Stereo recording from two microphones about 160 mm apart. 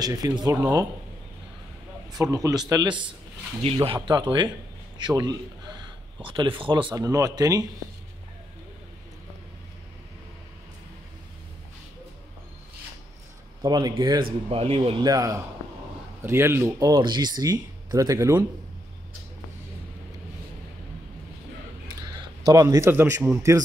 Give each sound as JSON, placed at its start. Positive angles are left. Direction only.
{"t": 0.0, "sound": "speech", "side_deg": -25}
{"t": 2.3, "sound": "speech", "side_deg": -20}
{"t": 13.6, "sound": "speech", "side_deg": -25}
{"t": 15.0, "sound": "speech", "side_deg": -20}
{"t": 16.8, "sound": "speech", "side_deg": -30}
{"t": 22.4, "sound": "speech", "side_deg": -20}